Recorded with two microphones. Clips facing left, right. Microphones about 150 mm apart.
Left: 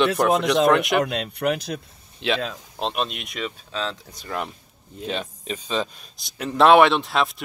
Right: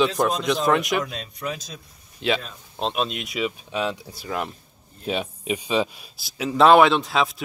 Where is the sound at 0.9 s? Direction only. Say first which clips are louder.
Left 5 dB; 70° left (ahead or behind).